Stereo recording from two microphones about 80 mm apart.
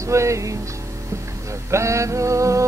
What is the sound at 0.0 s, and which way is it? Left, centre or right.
Music, right.